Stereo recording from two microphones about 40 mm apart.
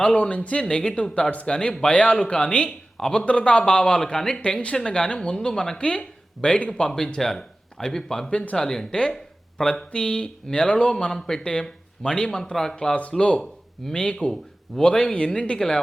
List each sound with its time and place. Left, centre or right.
0.0 s speech: left
0.6 s speech: centre
4.4 s speech: left
8.3 s speech: left
8.5 s speech: centre
9.1 s a sound: centre
9.9 s speech: left
11.0 s speech: centre